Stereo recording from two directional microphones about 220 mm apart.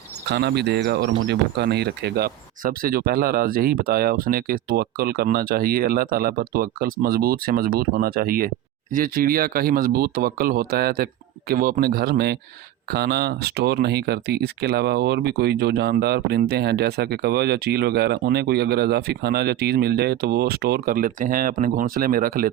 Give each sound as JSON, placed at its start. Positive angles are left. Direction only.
{"t": 0.3, "sound": "speech", "side_deg": -50}